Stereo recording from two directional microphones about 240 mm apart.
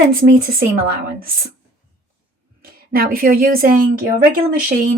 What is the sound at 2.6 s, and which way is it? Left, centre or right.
A woman's voice, right.